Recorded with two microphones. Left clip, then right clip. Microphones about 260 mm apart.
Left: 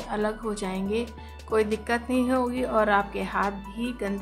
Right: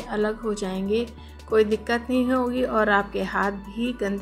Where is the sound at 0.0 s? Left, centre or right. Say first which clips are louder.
Right 3 dB; centre.